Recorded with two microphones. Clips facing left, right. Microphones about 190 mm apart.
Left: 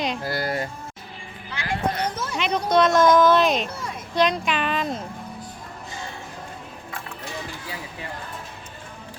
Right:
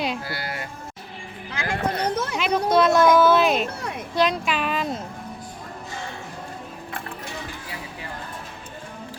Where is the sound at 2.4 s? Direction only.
5° right (ahead or behind).